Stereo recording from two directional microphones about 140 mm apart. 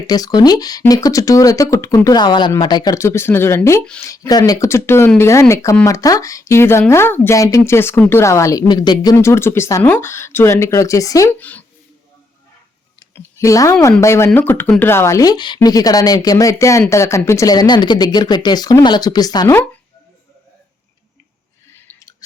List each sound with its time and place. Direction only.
0.1 s speech: 25° left (ahead or behind)
11.3 s speech: 10° left (ahead or behind)
13.1 s speech: 25° left (ahead or behind)
21.7 s a sound: 15° left (ahead or behind)